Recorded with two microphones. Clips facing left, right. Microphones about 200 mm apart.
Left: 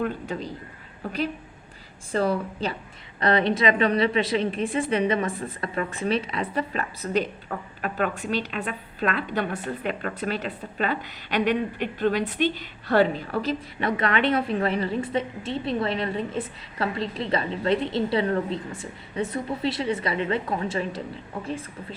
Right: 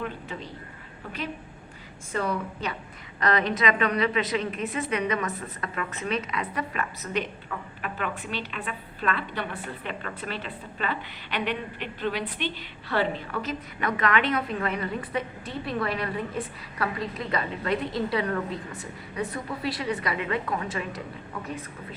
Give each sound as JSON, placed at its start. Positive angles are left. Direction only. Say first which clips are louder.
{"t": 0.0, "sound": "a woman's voice", "louder": "left 6 dB", "side_deg": 40}